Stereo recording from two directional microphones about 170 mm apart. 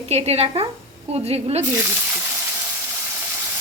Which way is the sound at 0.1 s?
35° right (ahead or behind).